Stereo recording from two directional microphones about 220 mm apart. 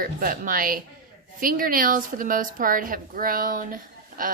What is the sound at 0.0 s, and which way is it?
A woman's voice, 40° right (ahead or behind).